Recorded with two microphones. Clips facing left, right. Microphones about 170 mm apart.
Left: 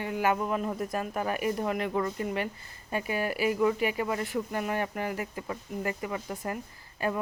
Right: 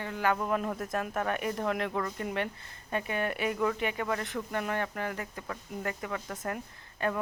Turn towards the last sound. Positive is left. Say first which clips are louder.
# left 1 dB
turn(degrees=5)  # may be behind; listen again after turning